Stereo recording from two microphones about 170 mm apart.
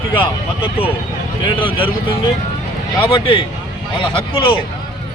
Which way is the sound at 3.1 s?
30° left (ahead or behind).